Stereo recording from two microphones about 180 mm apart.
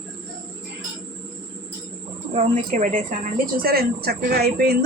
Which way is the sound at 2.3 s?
45° right (ahead or behind).